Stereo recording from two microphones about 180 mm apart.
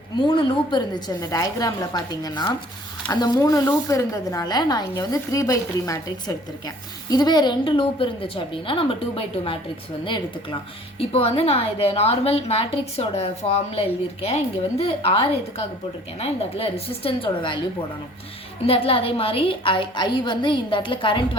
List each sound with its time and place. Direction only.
0.2 s a woman's voice: 25° left (ahead or behind)
11.1 s a woman's voice: 35° left (ahead or behind)
16.2 s a woman's voice: 35° left (ahead or behind)
18.6 s a woman's voice: 30° left (ahead or behind)